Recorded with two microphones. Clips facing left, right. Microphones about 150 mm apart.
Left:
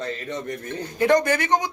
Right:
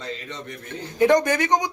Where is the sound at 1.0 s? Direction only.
15° right (ahead or behind).